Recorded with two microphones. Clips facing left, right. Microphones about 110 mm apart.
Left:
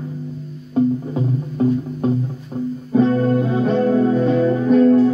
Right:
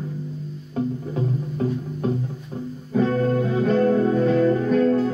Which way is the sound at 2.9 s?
25° left (ahead or behind).